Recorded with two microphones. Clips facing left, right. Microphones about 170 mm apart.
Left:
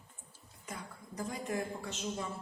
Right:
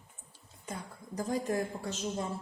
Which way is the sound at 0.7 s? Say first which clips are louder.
Right 4 dB; 35° right (ahead or behind).